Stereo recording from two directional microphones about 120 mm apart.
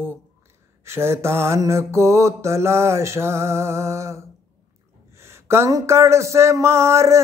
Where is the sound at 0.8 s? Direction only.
20° right (ahead or behind).